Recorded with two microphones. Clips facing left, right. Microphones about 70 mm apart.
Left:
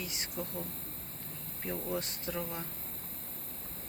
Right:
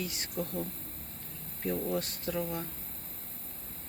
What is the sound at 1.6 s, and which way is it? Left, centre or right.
Speech, left.